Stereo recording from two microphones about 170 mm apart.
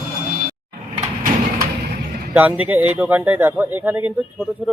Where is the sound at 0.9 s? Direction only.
55° right (ahead or behind).